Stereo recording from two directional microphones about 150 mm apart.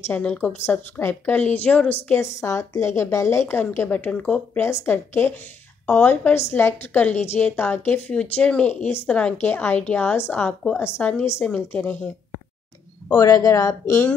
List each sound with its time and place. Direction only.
0.1 s a woman's voice: 10° left (ahead or behind)
13.1 s speech: 20° left (ahead or behind)